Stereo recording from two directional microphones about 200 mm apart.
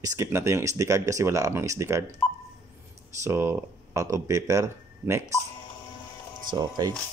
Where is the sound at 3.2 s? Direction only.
10° right (ahead or behind).